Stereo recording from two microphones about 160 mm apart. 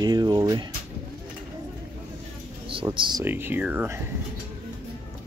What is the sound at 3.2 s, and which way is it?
Speech, 10° right (ahead or behind).